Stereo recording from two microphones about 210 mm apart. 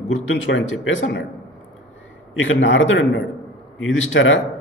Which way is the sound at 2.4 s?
65° left (ahead or behind).